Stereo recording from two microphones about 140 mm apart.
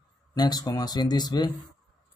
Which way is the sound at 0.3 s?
30° left (ahead or behind).